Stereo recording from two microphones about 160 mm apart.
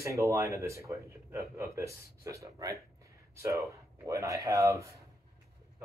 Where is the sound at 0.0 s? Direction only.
20° right (ahead or behind).